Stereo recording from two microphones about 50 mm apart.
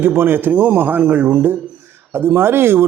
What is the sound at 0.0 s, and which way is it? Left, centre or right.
A man's voice, right.